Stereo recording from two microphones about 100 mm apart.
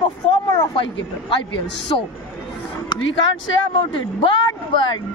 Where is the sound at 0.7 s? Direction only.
60° left (ahead or behind).